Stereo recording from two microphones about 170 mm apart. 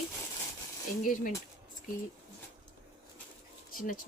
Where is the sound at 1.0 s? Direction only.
50° left (ahead or behind).